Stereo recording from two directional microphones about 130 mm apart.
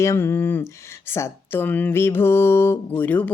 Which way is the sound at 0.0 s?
20° left (ahead or behind).